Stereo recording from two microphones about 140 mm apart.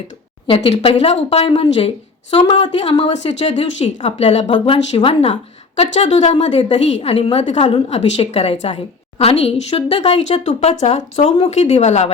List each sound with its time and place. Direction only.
0.4 s a woman's voice: 40° left (ahead or behind)